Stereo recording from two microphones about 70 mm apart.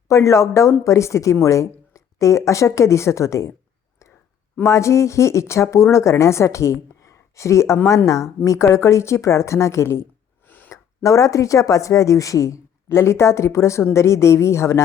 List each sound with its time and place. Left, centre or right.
0.1 s a woman's voice: left
4.6 s a woman's voice: left
10.4 s a sound: left
10.7 s speech: left